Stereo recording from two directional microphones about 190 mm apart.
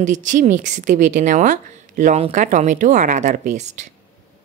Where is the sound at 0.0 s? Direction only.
40° right (ahead or behind).